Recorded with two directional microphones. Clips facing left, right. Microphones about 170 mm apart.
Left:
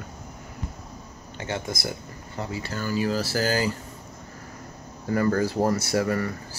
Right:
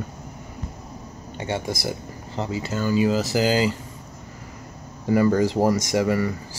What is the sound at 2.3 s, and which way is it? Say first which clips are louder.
Speech: right 5 dB; 20° right (ahead or behind).